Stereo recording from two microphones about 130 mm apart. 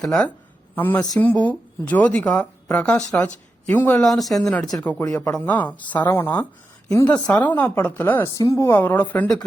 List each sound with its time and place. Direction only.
0.0 s speech: 5° left (ahead or behind)
4.0 s speech: centre (ahead or behind)
5.0 s speech: 25° left (ahead or behind)
5.3 s speech: 10° left (ahead or behind)